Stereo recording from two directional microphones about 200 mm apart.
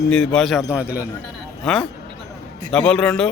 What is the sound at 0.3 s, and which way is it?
Speech, centre (ahead or behind).